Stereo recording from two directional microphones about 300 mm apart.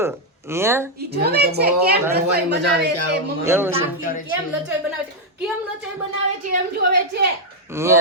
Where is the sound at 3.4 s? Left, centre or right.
Centre.